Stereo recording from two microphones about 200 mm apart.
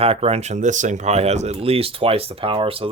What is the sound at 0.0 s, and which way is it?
Speech, 30° right (ahead or behind).